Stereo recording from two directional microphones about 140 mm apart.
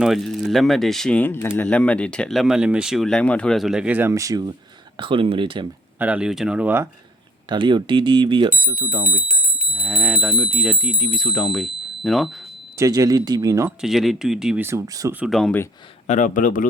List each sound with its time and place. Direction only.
0.0 s speech: centre (ahead or behind)
4.1 s speech: 25° right (ahead or behind)
4.9 s speech: 35° right (ahead or behind)
6.0 s speech: 10° right (ahead or behind)
7.5 s speech: 35° right (ahead or behind)
9.0 s speech: 10° right (ahead or behind)
12.7 s speech: 25° right (ahead or behind)
13.7 s speech: centre (ahead or behind)
14.6 s speech: 20° right (ahead or behind)
15.3 s speech: centre (ahead or behind)
16.0 s a man's voice: 65° left (ahead or behind)